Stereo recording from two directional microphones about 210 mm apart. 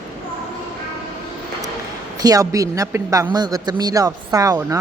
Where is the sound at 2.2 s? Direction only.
15° right (ahead or behind).